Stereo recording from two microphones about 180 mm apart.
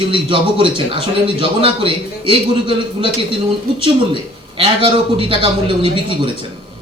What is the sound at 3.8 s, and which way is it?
A man's voice, 30° right (ahead or behind).